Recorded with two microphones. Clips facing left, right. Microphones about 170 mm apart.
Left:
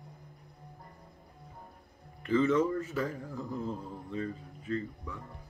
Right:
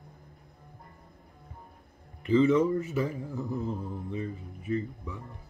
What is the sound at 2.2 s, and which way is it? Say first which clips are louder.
Speech: right 4 dB; 15° right (ahead or behind).